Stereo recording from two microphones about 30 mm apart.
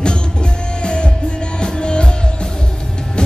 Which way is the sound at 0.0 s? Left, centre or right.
Left.